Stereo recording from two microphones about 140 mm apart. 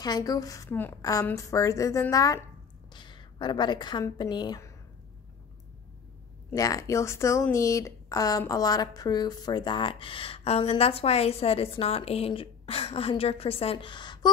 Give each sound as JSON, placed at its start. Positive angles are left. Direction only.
{"t": 0.0, "sound": "a woman's voice", "side_deg": 30}
{"t": 2.9, "sound": "a sound", "side_deg": 35}
{"t": 4.0, "sound": "speech", "side_deg": 30}
{"t": 6.5, "sound": "a woman's voice", "side_deg": 25}